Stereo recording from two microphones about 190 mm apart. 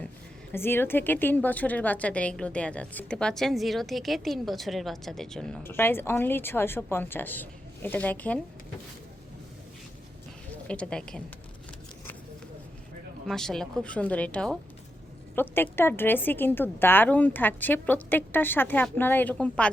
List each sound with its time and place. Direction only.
0.5 s a woman's voice: 10° left (ahead or behind)
10.7 s speech: 5° left (ahead or behind)
13.2 s a woman's voice: centre (ahead or behind)